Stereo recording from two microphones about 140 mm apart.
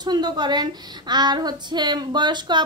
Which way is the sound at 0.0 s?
30° right (ahead or behind).